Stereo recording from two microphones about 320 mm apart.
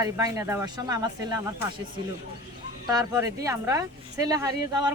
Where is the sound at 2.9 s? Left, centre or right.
Centre.